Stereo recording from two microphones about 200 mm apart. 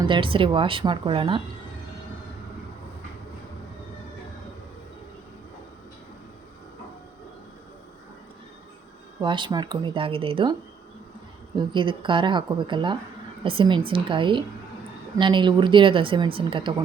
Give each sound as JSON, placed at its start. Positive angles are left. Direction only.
{"t": 0.1, "sound": "speech", "side_deg": -25}
{"t": 9.2, "sound": "speech", "side_deg": -25}
{"t": 11.5, "sound": "speech", "side_deg": -25}